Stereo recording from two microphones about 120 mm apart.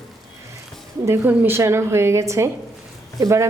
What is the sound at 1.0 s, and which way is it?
A woman's voice, 20° right (ahead or behind).